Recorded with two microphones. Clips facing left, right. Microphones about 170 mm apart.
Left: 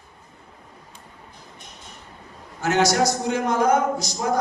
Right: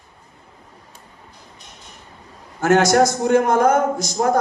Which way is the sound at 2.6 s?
50° right (ahead or behind).